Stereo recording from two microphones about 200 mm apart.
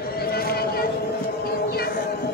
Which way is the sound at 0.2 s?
50° left (ahead or behind).